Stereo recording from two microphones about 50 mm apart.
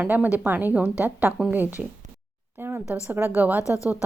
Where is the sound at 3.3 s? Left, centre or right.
Right.